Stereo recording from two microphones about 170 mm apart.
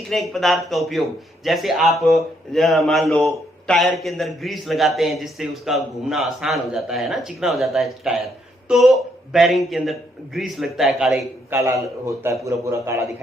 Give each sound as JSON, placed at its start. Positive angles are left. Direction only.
{"t": 0.1, "sound": "a man's voice", "side_deg": 0}
{"t": 11.5, "sound": "a man's voice", "side_deg": -15}